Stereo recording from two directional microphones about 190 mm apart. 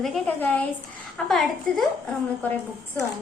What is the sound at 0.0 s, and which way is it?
A woman's voice, 5° left (ahead or behind).